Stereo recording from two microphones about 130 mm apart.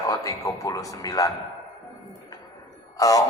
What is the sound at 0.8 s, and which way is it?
Speech, 30° left (ahead or behind).